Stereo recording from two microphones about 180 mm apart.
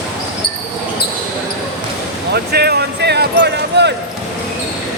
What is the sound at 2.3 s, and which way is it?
Basketball bounce, 65° right (ahead or behind).